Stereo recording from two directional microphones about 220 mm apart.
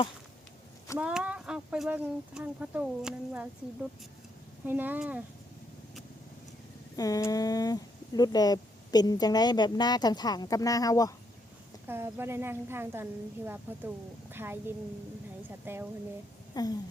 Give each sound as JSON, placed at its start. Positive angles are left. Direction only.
{"t": 0.9, "sound": "speech", "side_deg": -5}
{"t": 4.6, "sound": "a woman's voice", "side_deg": -10}
{"t": 6.9, "sound": "speech", "side_deg": 15}
{"t": 11.9, "sound": "a woman's voice", "side_deg": -10}
{"t": 16.6, "sound": "speech", "side_deg": 15}